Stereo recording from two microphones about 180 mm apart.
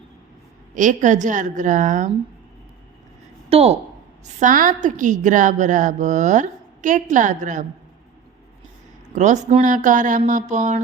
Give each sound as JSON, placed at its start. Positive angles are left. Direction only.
{"t": 0.7, "sound": "a woman's voice", "side_deg": -45}
{"t": 3.5, "sound": "speech", "side_deg": -35}
{"t": 4.3, "sound": "a woman's voice", "side_deg": -45}
{"t": 9.1, "sound": "a woman's voice", "side_deg": -40}